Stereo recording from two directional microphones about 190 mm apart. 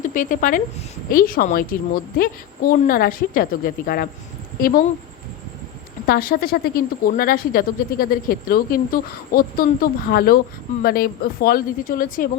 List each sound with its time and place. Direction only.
0.0 s a woman's voice: 45° left (ahead or behind)
6.1 s speech: 50° left (ahead or behind)